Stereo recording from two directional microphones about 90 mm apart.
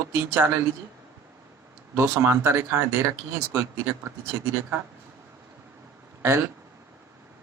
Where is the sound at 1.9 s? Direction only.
25° right (ahead or behind).